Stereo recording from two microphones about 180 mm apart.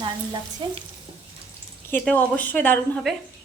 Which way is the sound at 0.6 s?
25° right (ahead or behind).